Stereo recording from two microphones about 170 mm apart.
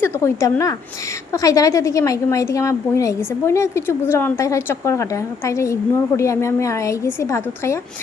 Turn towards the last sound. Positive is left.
turn(degrees=15)  # may be behind; listen again after turning